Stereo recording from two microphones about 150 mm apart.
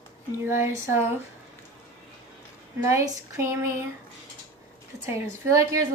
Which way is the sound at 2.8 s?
20° right (ahead or behind).